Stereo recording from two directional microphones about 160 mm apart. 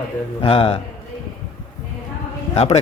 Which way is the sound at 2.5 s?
40° left (ahead or behind).